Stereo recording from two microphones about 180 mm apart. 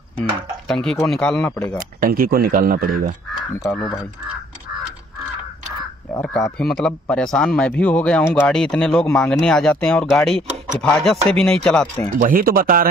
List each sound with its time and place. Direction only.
0.2 s speech: 5° left (ahead or behind)
1.8 s speech: 50° right (ahead or behind)
6.6 s speech: centre (ahead or behind)
12.2 s speech: 50° right (ahead or behind)